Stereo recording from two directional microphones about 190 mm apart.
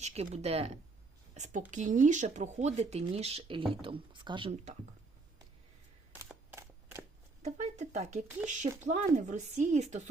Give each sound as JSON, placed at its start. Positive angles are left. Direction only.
{"t": 0.0, "sound": "a woman's voice", "side_deg": -35}
{"t": 6.1, "sound": "camera", "side_deg": -10}
{"t": 7.4, "sound": "speech", "side_deg": -35}